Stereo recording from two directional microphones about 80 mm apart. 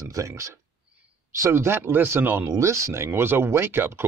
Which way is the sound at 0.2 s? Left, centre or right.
Right.